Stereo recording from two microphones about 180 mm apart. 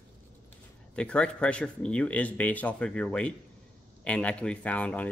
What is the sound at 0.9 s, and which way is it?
Speech, 5° left (ahead or behind).